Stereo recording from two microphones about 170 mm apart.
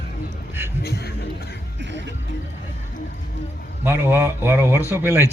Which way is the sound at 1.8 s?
90° right.